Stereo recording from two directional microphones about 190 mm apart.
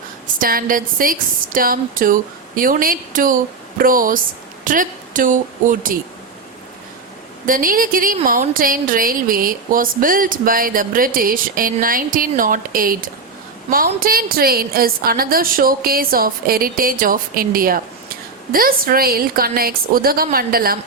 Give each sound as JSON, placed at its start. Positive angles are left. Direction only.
{"t": 0.3, "sound": "a woman's voice", "side_deg": -50}
{"t": 7.4, "sound": "a woman's voice", "side_deg": -45}